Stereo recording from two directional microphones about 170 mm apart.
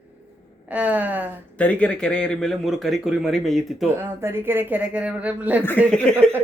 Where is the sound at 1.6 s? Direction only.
5° left (ahead or behind).